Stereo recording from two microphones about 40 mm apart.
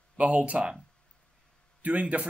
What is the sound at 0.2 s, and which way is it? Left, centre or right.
Speech, right.